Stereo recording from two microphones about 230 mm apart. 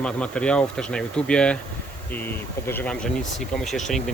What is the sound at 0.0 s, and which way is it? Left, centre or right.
Speech, centre.